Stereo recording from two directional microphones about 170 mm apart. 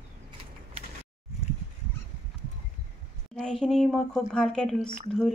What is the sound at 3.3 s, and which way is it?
Speech, 5° left (ahead or behind).